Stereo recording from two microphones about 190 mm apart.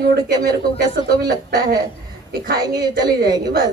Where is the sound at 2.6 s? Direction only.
20° right (ahead or behind).